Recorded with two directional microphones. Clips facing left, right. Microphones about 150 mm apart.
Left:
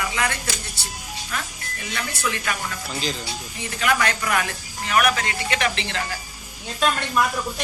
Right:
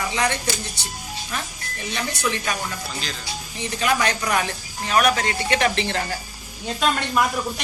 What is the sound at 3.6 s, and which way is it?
Speech, 25° right (ahead or behind).